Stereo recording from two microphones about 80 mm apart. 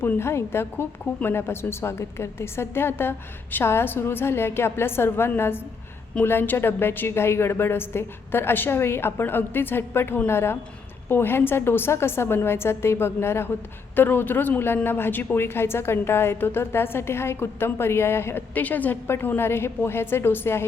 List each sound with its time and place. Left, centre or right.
0.0 s a woman's voice: left